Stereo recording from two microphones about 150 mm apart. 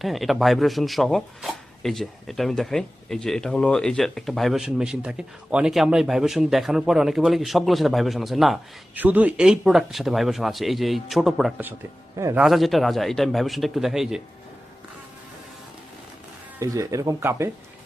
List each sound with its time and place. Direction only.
0.0 s speech: centre (ahead or behind)
12.1 s a man's voice: 20° right (ahead or behind)
12.4 s speech: centre (ahead or behind)
16.6 s speech: 20° right (ahead or behind)